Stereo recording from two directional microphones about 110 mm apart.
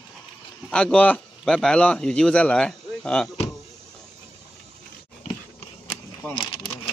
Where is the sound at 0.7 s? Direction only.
10° left (ahead or behind).